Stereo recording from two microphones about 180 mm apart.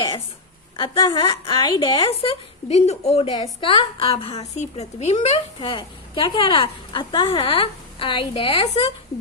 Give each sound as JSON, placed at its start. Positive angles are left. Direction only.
{"t": 0.8, "sound": "a woman's voice", "side_deg": 25}